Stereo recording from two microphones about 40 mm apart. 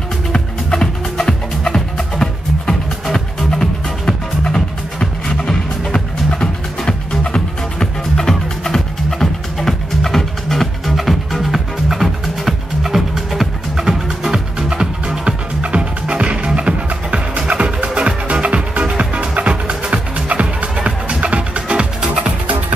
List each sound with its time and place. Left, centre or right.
0.3 s music: centre; by 22.3 s right